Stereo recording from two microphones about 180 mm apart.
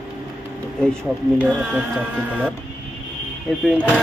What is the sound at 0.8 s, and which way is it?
Speech, 5° right (ahead or behind).